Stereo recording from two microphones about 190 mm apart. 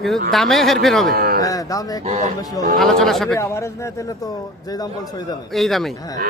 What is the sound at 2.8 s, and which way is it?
Speech, centre (ahead or behind).